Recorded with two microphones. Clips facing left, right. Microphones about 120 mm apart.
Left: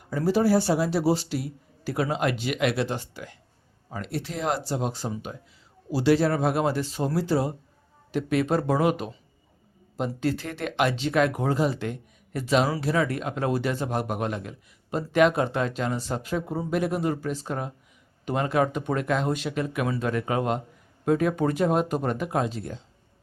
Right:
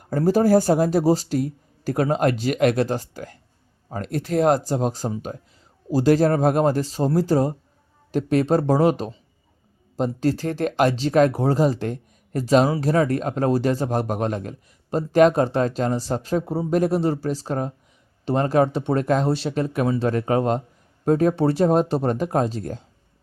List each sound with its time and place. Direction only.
0.3 s a man's voice: 45° right (ahead or behind)